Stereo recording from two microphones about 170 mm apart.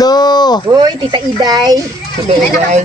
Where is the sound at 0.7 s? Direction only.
25° right (ahead or behind).